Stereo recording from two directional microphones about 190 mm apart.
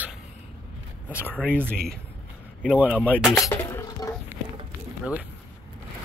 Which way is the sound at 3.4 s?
15° left (ahead or behind).